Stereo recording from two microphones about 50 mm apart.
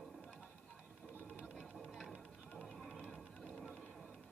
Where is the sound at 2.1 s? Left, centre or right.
Centre.